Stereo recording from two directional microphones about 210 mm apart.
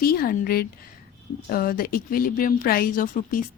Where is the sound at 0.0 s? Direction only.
45° left (ahead or behind).